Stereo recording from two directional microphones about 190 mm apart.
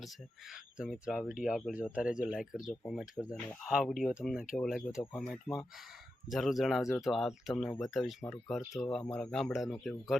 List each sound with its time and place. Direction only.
0.0 s speech: centre (ahead or behind)